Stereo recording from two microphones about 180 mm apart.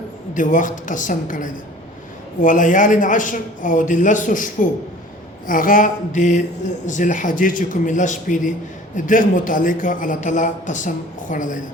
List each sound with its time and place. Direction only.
0.3 s a man's voice: 45° left (ahead or behind)
5.5 s a man's voice: 50° left (ahead or behind)